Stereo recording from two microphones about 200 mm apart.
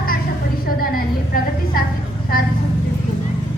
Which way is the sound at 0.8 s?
45° left (ahead or behind).